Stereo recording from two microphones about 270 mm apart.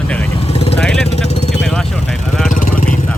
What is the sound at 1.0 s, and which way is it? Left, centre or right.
Vehicle, left.